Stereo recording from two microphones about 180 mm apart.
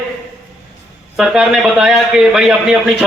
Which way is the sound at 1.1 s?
Centre (ahead or behind).